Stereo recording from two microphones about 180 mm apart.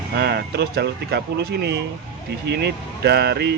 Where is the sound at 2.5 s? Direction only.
65° right (ahead or behind).